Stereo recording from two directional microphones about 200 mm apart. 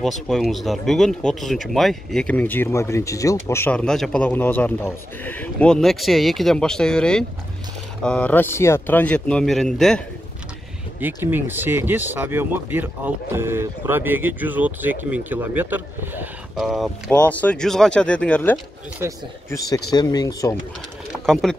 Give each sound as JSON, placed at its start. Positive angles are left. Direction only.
{"t": 0.0, "sound": "speech", "side_deg": 0}
{"t": 11.0, "sound": "speech", "side_deg": -10}
{"t": 19.0, "sound": "speech", "side_deg": -15}
{"t": 19.5, "sound": "speech", "side_deg": 15}
{"t": 21.3, "sound": "speech", "side_deg": 0}